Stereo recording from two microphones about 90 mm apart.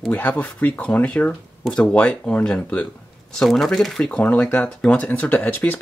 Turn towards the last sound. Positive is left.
turn(degrees=20)  # may be behind; listen again after turning